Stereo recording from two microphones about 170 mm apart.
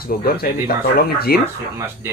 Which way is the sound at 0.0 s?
65° left (ahead or behind).